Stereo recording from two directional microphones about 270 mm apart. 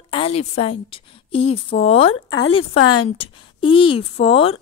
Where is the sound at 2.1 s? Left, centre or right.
Left.